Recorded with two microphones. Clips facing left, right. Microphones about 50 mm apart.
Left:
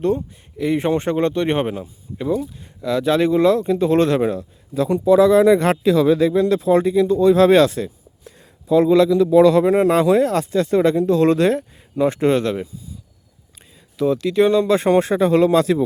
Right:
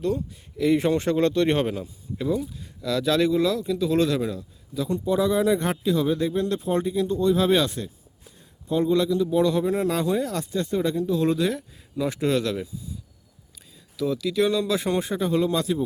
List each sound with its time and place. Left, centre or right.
0.0 s speech: left
0.5 s speech: left
5.0 s speech: left
8.7 s speech: left
10.0 s speech: left
13.9 s speech: left
14.8 s speech: left